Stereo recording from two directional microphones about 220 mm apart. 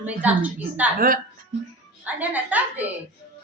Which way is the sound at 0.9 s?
40° right (ahead or behind).